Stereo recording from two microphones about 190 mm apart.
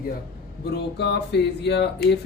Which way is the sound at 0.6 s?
65° left (ahead or behind).